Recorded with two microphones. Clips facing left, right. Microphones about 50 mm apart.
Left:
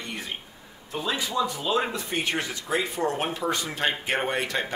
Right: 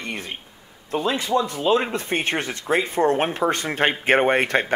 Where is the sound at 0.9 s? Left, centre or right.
Right.